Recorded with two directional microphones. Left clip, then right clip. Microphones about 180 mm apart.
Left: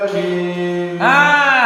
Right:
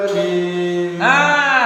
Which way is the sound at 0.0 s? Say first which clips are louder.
Right 1 dB; 25° right (ahead or behind).